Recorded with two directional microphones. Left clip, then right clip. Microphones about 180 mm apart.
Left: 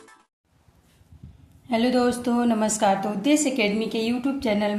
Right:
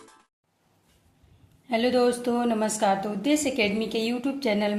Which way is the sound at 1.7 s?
Centre (ahead or behind).